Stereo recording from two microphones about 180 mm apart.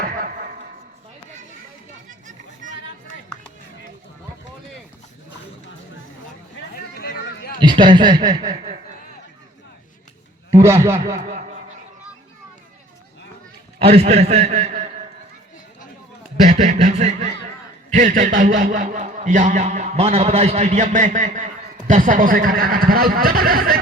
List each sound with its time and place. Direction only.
7.0 s a sound: 60° left (ahead or behind)
7.6 s a man's voice: 25° right (ahead or behind)
10.5 s a man's voice: 15° right (ahead or behind)
11.1 s speech: 40° right (ahead or behind)
13.7 s a man's voice: 35° right (ahead or behind)
16.5 s a man's voice: 40° right (ahead or behind); by 23.8 s 55° right (ahead or behind)